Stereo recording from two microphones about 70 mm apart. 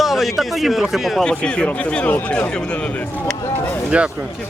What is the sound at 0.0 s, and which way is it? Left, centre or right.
A man's voice, centre.